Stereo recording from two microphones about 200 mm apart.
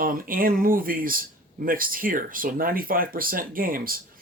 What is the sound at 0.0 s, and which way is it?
Speech, 45° right (ahead or behind).